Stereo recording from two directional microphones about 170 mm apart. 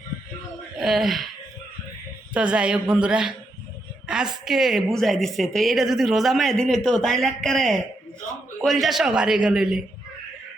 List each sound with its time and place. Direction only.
0.8 s speech: centre (ahead or behind)
2.3 s a woman's voice: 5° right (ahead or behind)